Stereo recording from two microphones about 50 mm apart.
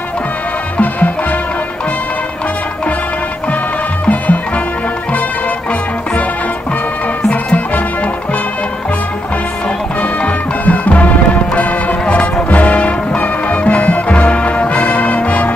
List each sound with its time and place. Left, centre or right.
0.7 s music: left
4.0 s music: left
10.6 s music: left